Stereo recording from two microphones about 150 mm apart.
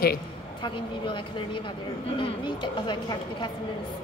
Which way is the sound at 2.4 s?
30° left (ahead or behind).